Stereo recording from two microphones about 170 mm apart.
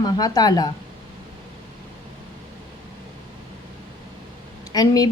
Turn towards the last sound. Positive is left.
turn(degrees=20)  # may be behind; listen again after turning